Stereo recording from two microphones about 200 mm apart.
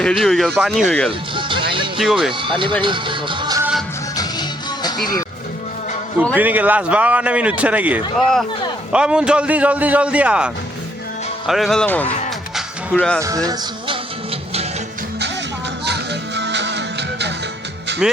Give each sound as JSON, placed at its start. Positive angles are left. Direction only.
{"t": 0.0, "sound": "a man's voice", "side_deg": 0}
{"t": 1.4, "sound": "music", "side_deg": -25}
{"t": 2.0, "sound": "a man's voice", "side_deg": 0}
{"t": 2.4, "sound": "speech", "side_deg": -25}
{"t": 2.8, "sound": "music", "side_deg": -25}
{"t": 3.6, "sound": "music", "side_deg": -5}
{"t": 4.2, "sound": "music", "side_deg": 20}
{"t": 6.3, "sound": "a man's voice", "side_deg": -10}
{"t": 12.5, "sound": "music", "side_deg": 5}
{"t": 13.2, "sound": "music", "side_deg": -15}
{"t": 15.8, "sound": "music", "side_deg": -60}
{"t": 18.0, "sound": "a man's voice", "side_deg": -5}